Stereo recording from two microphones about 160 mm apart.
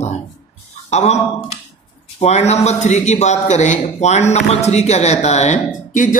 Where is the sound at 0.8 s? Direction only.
45° left (ahead or behind).